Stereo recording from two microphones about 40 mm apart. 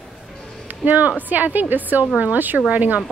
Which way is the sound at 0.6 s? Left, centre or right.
Right.